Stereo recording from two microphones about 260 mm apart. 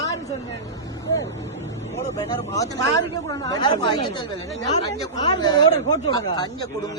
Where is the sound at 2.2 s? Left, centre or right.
Centre.